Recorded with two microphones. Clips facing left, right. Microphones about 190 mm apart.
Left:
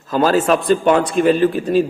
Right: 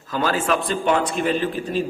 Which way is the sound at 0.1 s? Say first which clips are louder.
Left 7 dB; 40° left (ahead or behind).